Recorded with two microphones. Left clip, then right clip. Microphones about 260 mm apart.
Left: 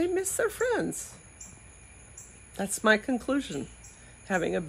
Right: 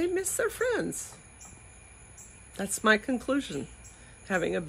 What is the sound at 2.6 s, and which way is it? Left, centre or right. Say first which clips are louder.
Speech: left 1 dB; centre.